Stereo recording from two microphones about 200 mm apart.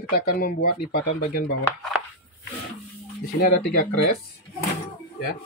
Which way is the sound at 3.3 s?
50° left (ahead or behind).